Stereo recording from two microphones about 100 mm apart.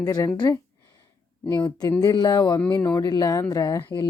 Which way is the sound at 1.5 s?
40° left (ahead or behind).